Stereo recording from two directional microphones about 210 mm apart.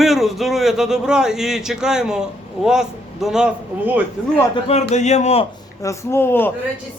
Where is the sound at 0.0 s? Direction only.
Centre (ahead or behind).